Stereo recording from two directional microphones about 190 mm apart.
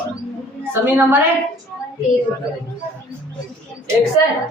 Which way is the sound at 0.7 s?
10° right (ahead or behind).